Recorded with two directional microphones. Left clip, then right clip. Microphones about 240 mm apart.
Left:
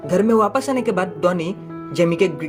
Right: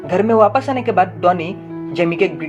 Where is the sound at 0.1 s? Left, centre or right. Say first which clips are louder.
Right 4 dB; left.